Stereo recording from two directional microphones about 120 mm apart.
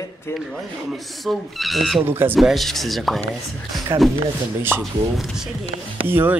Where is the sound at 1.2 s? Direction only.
Centre (ahead or behind).